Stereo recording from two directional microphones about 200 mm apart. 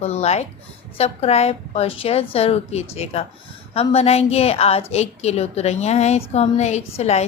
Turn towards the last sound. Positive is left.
turn(degrees=35)  # may be behind; listen again after turning